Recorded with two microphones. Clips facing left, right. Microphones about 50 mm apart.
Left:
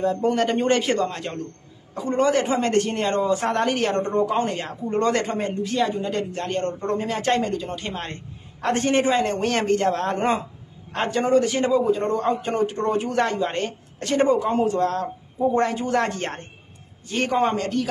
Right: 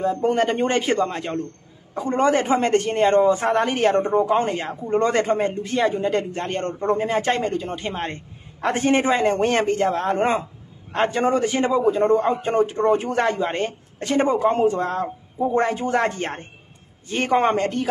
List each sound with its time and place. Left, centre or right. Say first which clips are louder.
0.0 s a man's voice: right 1 dB; centre
2.0 s a man's voice: right 1 dB; right
3.4 s a man's voice: right 2 dB; centre
3.7 s a man's voice: right 4 dB; right
4.0 s a man's voice: right 3 dB; centre
5.5 s a man's voice: right 2 dB; right
7.9 s a sound: right 3 dB; right
8.8 s a man's voice: right 2 dB; right
9.4 s a man's voice: right 3 dB; right
9.7 s a man's voice: right 1 dB; centre
11.1 s a man's voice: left 2 dB; right
14.4 s speech: right 4 dB; right
14.7 s a man's voice: left 1 dB; right
17.3 s speech: right 4 dB; right